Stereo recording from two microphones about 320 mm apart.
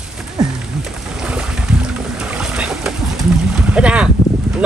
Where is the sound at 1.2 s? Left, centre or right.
Centre.